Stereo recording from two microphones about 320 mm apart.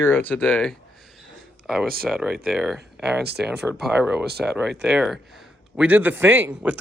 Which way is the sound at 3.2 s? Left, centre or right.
Right.